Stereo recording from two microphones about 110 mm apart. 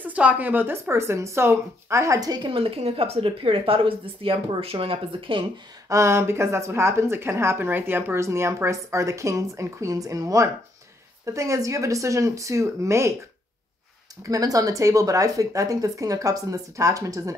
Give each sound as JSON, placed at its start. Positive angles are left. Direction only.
{"t": 0.0, "sound": "speech", "side_deg": -10}
{"t": 2.5, "sound": "a woman's voice", "side_deg": -60}
{"t": 5.9, "sound": "speech", "side_deg": -25}
{"t": 14.2, "sound": "speech", "side_deg": -35}